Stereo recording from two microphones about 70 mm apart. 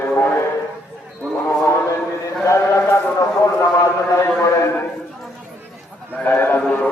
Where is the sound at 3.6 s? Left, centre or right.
Left.